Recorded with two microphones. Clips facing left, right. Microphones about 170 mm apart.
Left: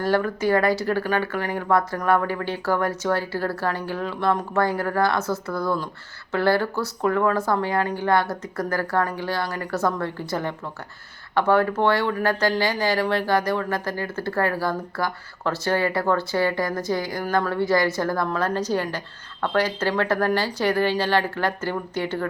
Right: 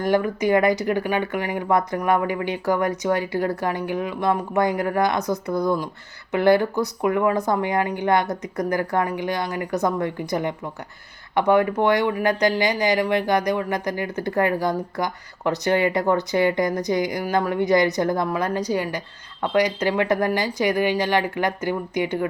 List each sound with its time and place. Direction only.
0.0 s speech: 15° right (ahead or behind)